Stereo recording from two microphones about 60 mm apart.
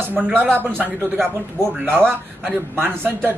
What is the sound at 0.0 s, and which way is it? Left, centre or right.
Speech, right.